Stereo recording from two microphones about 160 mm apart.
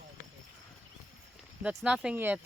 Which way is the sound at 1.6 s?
5° right (ahead or behind).